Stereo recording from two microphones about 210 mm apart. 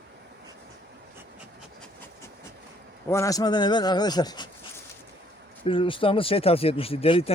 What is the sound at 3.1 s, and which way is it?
A man's voice, 15° left (ahead or behind).